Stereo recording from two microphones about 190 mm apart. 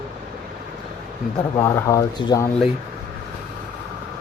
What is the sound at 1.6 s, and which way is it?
Speech, 15° left (ahead or behind).